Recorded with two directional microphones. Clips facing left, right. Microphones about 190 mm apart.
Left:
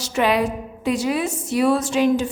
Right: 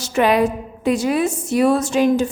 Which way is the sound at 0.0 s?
50° right (ahead or behind).